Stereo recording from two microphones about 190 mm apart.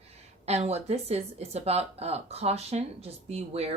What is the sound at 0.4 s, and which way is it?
Speech, 35° right (ahead or behind).